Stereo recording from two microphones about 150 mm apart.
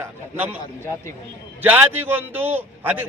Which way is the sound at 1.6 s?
10° right (ahead or behind).